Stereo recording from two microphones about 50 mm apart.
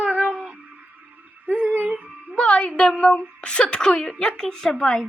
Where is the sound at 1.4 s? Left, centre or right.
Right.